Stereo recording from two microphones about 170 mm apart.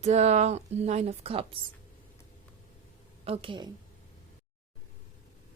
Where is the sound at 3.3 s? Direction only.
30° right (ahead or behind).